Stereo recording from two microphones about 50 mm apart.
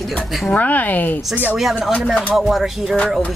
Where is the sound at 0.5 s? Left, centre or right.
Left.